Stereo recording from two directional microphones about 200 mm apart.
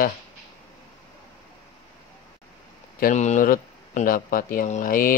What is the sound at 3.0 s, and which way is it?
Speech, 40° left (ahead or behind).